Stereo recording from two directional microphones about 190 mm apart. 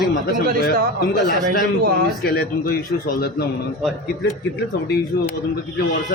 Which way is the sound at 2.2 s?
50° left (ahead or behind).